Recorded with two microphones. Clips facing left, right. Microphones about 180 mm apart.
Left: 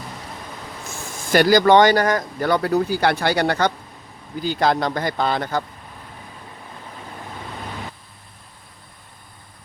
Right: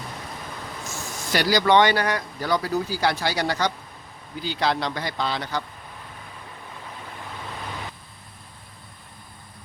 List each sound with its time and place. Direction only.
0.9 s speech: 50° left (ahead or behind)
4.4 s a man's voice: 45° left (ahead or behind)